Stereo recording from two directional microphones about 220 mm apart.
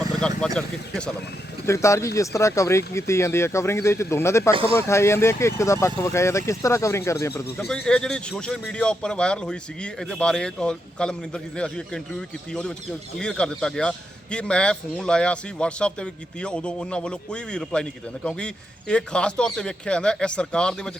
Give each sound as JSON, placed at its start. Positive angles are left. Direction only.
{"t": 0.3, "sound": "a man's voice", "side_deg": 5}
{"t": 1.6, "sound": "speech", "side_deg": 15}
{"t": 4.5, "sound": "speech", "side_deg": -25}
{"t": 4.9, "sound": "a man's voice", "side_deg": 10}